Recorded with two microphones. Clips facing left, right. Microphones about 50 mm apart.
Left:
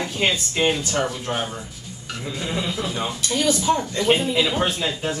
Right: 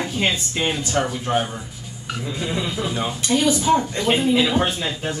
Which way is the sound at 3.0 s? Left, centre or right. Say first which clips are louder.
Right 3 dB; right.